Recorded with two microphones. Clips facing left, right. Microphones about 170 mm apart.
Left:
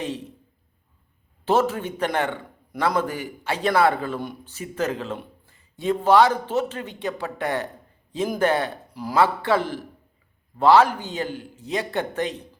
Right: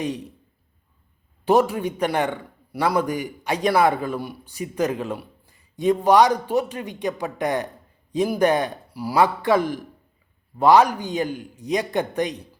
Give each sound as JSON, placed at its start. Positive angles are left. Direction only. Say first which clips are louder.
{"t": 1.5, "sound": "a man's voice", "louder": "right 3 dB", "side_deg": -15}